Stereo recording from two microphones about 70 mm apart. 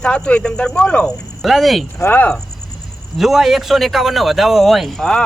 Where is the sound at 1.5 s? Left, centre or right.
Centre.